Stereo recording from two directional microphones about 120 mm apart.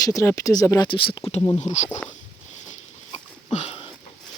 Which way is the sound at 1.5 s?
75° left (ahead or behind).